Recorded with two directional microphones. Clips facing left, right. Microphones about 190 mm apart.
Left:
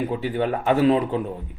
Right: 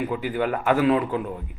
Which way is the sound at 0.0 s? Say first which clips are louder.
Left 1 dB; 30° left (ahead or behind).